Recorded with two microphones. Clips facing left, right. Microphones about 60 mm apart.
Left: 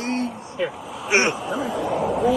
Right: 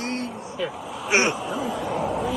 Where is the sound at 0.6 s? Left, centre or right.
Left.